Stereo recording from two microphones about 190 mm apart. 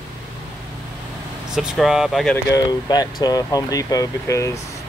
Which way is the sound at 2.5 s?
20° left (ahead or behind).